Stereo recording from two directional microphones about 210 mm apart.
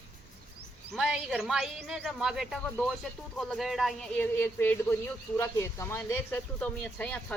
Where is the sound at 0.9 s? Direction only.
Centre (ahead or behind).